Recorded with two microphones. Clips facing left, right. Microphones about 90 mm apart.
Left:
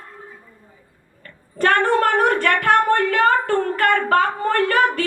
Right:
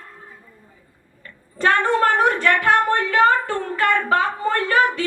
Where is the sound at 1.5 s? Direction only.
50° left (ahead or behind).